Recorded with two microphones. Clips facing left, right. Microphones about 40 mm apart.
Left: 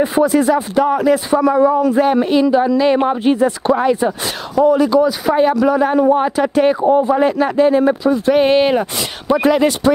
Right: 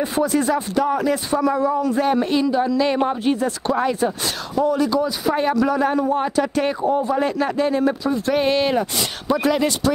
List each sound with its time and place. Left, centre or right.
0.0 s speech: centre
0.4 s speech: centre
0.7 s speech: centre
3.7 s speech: centre
5.9 s speech: left